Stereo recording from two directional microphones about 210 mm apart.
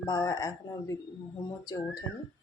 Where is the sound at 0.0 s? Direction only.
15° left (ahead or behind).